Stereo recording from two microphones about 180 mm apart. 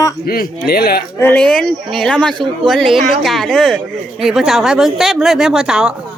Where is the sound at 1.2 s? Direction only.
10° left (ahead or behind).